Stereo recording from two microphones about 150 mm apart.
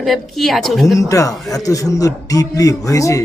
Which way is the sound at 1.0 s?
20° left (ahead or behind).